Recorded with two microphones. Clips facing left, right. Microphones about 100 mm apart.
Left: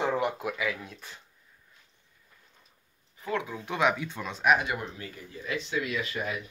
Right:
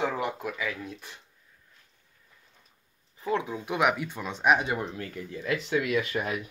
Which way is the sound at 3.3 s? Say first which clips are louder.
Right 2 dB; 20° right (ahead or behind).